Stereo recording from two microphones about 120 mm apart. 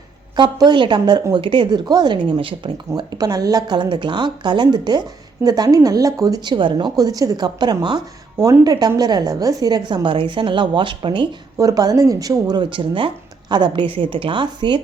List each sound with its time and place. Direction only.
0.3 s speech: 40° right (ahead or behind)
11.5 s a woman's voice: 30° right (ahead or behind)